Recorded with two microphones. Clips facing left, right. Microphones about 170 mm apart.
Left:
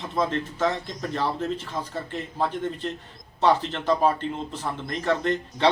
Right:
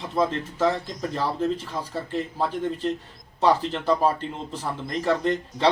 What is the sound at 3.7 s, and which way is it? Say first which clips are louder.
A man's voice: even; 10° right (ahead or behind).